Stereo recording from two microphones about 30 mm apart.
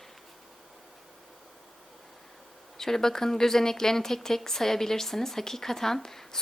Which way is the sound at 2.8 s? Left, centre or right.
Centre.